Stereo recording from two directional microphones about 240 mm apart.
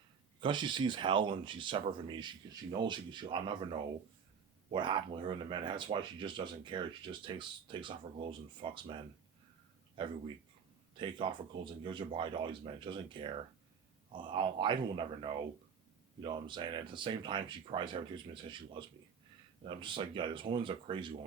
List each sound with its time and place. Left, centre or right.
0.4 s a man's voice: centre